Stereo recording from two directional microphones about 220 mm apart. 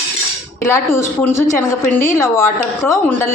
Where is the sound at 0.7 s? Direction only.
10° left (ahead or behind).